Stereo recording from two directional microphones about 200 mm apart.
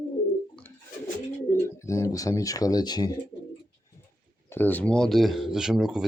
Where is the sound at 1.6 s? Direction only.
15° left (ahead or behind).